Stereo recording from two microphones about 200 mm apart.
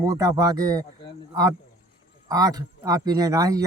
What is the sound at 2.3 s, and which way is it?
A man's voice, 20° right (ahead or behind).